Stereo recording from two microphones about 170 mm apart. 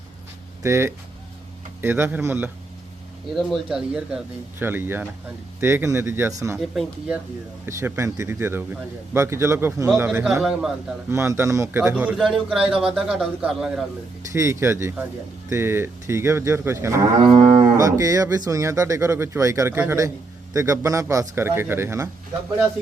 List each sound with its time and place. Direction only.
0.6 s a man's voice: 15° right (ahead or behind)
6.6 s a man's voice: centre (ahead or behind)
7.6 s a man's voice: 15° right (ahead or behind)
10.1 s a man's voice: 5° right (ahead or behind)
14.3 s a man's voice: 15° right (ahead or behind)